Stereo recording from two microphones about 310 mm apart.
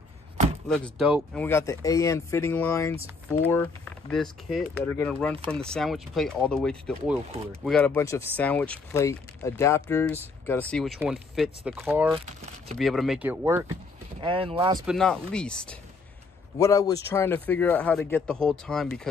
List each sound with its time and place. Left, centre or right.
0.7 s speech: centre
14.2 s speech: centre
14.9 s speech: centre